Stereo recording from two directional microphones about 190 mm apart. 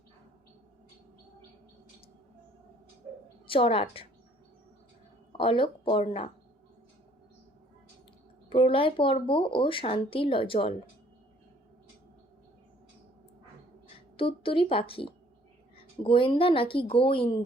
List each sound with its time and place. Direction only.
3.4 s a woman's voice: 30° left (ahead or behind)
5.3 s speech: 30° left (ahead or behind)
8.4 s speech: 30° left (ahead or behind)
14.2 s speech: 25° left (ahead or behind)